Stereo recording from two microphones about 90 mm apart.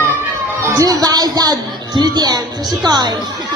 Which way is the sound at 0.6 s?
35° right (ahead or behind).